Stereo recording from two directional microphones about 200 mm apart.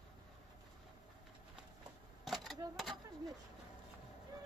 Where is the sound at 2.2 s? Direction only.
Centre (ahead or behind).